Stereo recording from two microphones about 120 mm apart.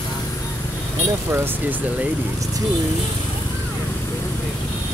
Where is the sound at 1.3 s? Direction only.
20° right (ahead or behind).